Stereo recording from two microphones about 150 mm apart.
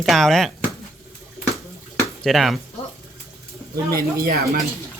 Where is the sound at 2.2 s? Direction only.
Centre (ahead or behind).